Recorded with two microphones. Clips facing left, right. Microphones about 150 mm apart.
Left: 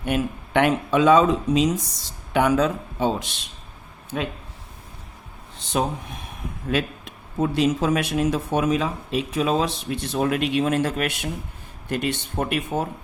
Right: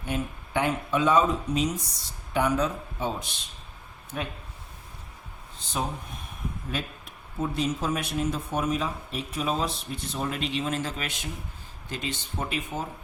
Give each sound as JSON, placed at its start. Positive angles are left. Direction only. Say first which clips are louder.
{"t": 0.0, "sound": "speech", "louder": "left 7 dB", "side_deg": 75}
{"t": 5.5, "sound": "speech", "louder": "left 7 dB", "side_deg": 75}